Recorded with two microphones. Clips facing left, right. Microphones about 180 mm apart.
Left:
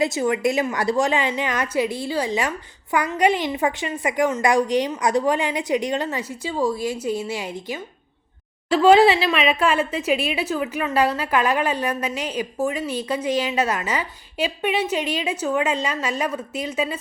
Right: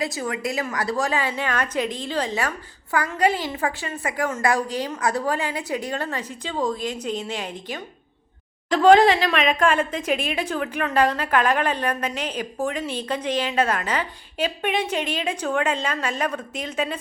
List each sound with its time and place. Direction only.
0.0 s a woman's voice: 25° left (ahead or behind); by 17.0 s 10° left (ahead or behind)